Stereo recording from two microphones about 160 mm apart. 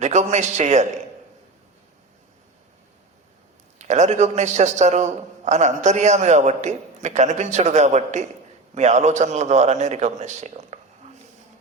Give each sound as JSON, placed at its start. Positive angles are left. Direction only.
{"t": 0.0, "sound": "a man's voice", "side_deg": -45}
{"t": 3.8, "sound": "a man's voice", "side_deg": -45}